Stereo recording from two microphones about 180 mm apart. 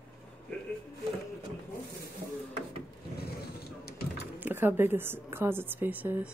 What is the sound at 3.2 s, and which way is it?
Vehicle, 60° left (ahead or behind).